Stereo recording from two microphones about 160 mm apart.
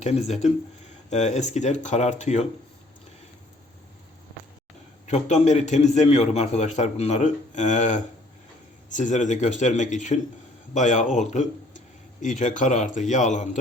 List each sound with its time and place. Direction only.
0.0 s a man's voice: 45° left (ahead or behind)
5.0 s a man's voice: 45° left (ahead or behind)